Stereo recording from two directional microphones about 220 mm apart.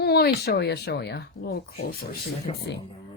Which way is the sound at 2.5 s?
25° left (ahead or behind).